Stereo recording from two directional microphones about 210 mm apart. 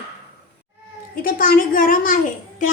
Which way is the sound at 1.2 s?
40° left (ahead or behind).